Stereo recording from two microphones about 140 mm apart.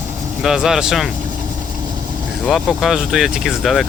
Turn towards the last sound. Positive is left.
turn(degrees=0)  # may be behind; listen again after turning